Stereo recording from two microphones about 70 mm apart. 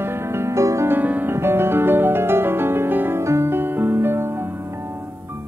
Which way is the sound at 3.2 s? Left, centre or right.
Right.